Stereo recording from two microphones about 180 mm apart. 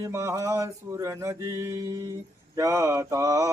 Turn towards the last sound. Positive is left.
turn(degrees=-20)  # may be behind; listen again after turning